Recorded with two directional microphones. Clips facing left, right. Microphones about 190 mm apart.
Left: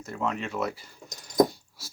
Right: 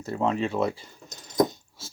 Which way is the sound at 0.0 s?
30° right (ahead or behind).